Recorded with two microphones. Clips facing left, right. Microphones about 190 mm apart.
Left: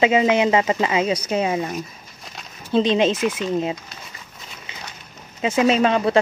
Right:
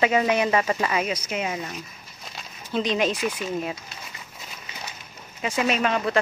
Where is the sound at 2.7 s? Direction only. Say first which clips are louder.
Left 6 dB; 25° left (ahead or behind).